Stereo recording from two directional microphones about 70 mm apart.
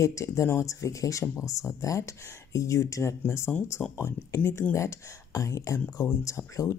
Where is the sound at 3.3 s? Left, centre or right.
Left.